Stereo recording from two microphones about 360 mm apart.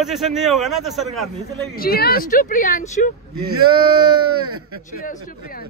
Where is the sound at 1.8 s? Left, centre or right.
Left.